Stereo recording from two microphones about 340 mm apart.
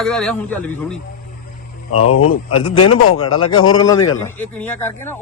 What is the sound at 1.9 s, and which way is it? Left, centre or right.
A man's voice, left.